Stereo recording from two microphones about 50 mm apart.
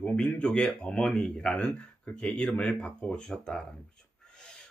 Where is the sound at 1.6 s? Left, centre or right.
Left.